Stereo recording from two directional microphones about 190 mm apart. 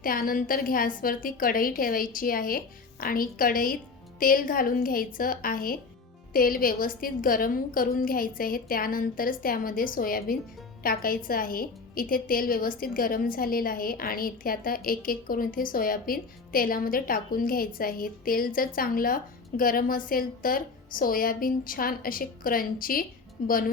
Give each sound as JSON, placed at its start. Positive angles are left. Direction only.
{"t": 0.0, "sound": "a woman's voice", "side_deg": 50}